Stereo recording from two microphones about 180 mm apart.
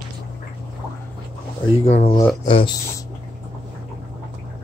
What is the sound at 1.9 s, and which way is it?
Speech, 35° left (ahead or behind).